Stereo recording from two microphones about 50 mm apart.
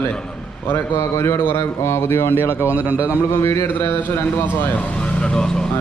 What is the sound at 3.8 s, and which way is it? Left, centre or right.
Speech, left.